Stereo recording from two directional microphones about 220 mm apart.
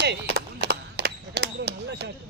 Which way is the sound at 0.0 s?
50° right (ahead or behind).